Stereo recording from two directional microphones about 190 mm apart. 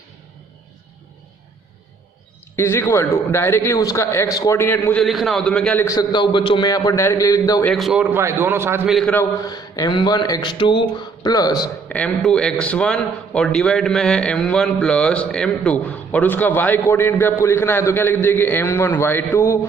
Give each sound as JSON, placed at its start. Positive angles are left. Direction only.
{"t": 2.6, "sound": "a man's voice", "side_deg": 10}
{"t": 5.8, "sound": "speech", "side_deg": 20}
{"t": 7.6, "sound": "a man's voice", "side_deg": 0}
{"t": 8.9, "sound": "a man's voice", "side_deg": 0}
{"t": 9.1, "sound": "speech", "side_deg": 20}
{"t": 11.9, "sound": "a man's voice", "side_deg": 5}